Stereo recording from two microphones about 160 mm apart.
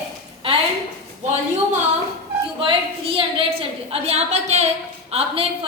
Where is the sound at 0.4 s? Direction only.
35° right (ahead or behind).